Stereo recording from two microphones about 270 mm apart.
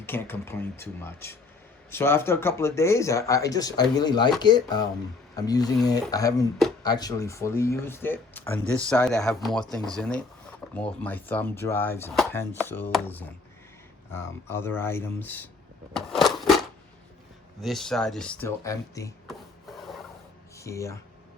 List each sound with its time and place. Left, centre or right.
0.0 s speech: centre
10.6 s a sound: centre
11.0 s speech: centre
15.9 s a sound: centre
17.6 s speech: centre
19.3 s rub: centre
20.6 s speech: centre